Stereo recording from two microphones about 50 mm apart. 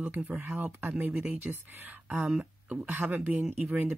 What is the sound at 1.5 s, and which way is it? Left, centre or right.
Speech, right.